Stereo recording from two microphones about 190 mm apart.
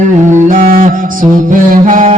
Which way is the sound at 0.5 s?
50° right (ahead or behind).